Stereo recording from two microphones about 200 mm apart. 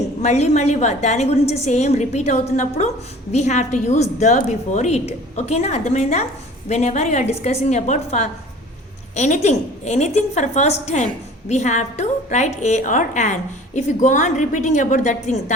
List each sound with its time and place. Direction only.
0.2 s a woman's voice: 35° left (ahead or behind)